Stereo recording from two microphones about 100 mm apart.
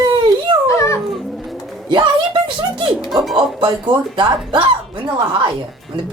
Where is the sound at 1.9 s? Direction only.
55° right (ahead or behind).